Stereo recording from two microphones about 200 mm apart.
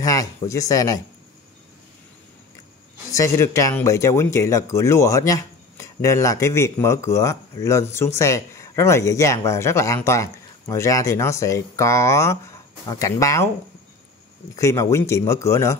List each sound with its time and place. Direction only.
0.0 s speech: 15° left (ahead or behind)
3.1 s speech: 15° left (ahead or behind)
14.5 s speech: 15° left (ahead or behind)